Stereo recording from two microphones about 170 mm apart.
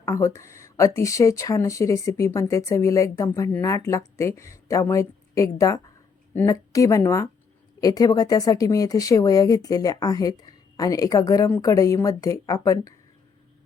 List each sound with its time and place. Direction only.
0.0 s a woman's voice: 15° left (ahead or behind)